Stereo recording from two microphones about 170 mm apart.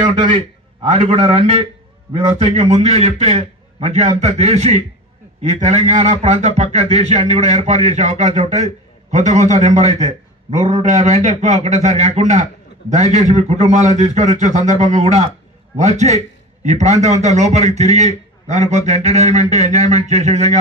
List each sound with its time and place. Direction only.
0.8 s a man's voice: 45° right (ahead or behind)